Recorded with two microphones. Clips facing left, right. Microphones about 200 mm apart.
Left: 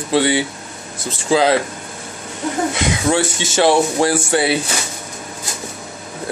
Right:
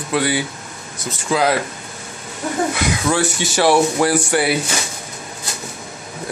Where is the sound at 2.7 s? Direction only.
25° left (ahead or behind).